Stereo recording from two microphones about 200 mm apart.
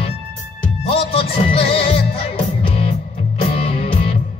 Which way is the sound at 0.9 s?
25° left (ahead or behind).